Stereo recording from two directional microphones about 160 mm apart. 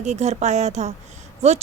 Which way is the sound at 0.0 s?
45° right (ahead or behind).